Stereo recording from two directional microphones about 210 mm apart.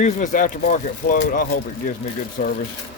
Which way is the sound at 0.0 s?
35° left (ahead or behind).